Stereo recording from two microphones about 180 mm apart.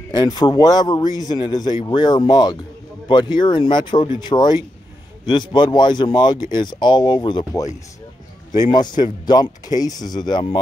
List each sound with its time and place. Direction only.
0.1 s a man's voice: 20° left (ahead or behind)